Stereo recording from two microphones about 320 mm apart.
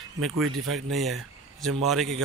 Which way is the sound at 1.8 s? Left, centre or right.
Centre.